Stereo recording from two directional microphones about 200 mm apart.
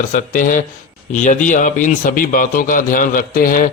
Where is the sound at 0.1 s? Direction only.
40° left (ahead or behind).